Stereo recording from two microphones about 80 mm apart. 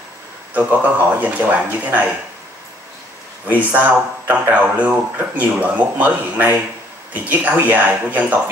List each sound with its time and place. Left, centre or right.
0.6 s speech: right
3.4 s speech: right